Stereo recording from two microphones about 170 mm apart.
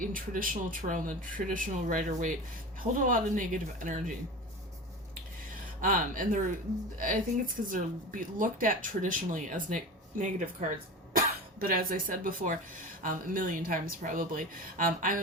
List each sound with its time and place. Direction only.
0.0 s speech: 55° right (ahead or behind)
5.8 s speech: 50° right (ahead or behind)